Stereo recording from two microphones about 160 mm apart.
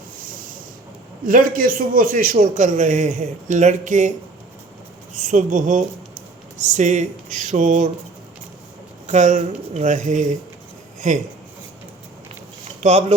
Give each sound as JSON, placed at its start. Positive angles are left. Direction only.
{"t": 1.2, "sound": "a man's voice", "side_deg": -60}
{"t": 5.1, "sound": "a man's voice", "side_deg": -50}
{"t": 9.0, "sound": "a man's voice", "side_deg": -50}
{"t": 12.8, "sound": "speech", "side_deg": -40}